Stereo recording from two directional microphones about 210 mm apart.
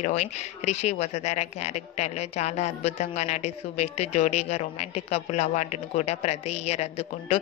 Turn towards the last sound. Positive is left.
turn(degrees=30)  # may be behind; listen again after turning